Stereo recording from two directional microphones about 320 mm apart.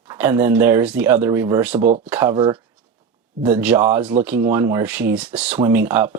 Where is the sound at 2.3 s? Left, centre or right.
Centre.